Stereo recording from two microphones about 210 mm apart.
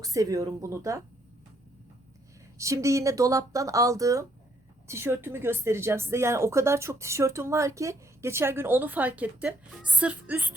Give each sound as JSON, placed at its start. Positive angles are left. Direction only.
{"t": 0.0, "sound": "speech", "side_deg": -15}
{"t": 2.6, "sound": "speech", "side_deg": -15}